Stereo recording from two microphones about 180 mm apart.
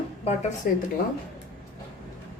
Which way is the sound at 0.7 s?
55° left (ahead or behind).